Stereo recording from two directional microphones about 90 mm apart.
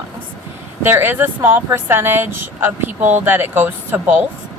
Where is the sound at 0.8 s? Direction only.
25° right (ahead or behind).